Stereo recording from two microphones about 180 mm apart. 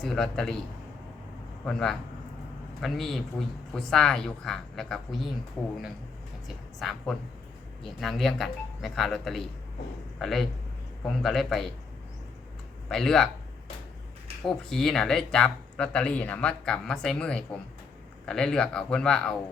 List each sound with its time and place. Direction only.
0.0 s speech: 5° left (ahead or behind)
1.6 s speech: 5° left (ahead or behind)
6.7 s a man's voice: centre (ahead or behind)
12.9 s speech: centre (ahead or behind)
14.4 s speech: centre (ahead or behind)